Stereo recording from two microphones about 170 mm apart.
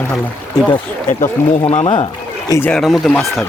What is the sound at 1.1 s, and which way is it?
Speech, 45° left (ahead or behind).